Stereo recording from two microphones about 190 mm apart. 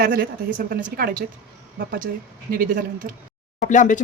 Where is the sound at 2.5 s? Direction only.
45° right (ahead or behind).